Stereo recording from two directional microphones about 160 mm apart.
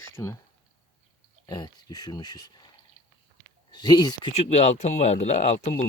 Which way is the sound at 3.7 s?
25° left (ahead or behind).